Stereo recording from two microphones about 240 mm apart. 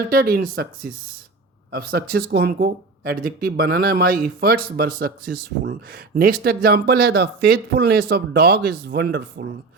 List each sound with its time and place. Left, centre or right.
0.1 s speech: right
6.1 s speech: right